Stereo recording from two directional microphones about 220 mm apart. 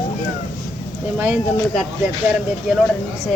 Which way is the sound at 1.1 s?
5° right (ahead or behind).